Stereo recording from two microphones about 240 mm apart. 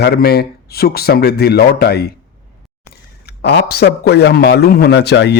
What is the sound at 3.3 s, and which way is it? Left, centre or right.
Speech, left.